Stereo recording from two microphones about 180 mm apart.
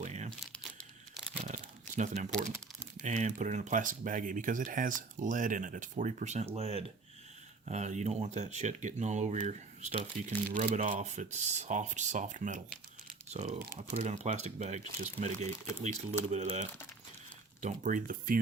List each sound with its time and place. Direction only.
0.0 s crumpling: 40° right (ahead or behind)
1.5 s a sound: 40° right (ahead or behind)
3.0 s speech: 40° right (ahead or behind)